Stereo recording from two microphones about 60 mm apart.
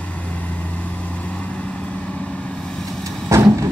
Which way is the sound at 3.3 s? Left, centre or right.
Right.